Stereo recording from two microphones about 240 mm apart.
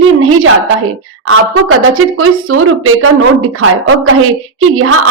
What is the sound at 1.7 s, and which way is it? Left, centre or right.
A woman's voice, right.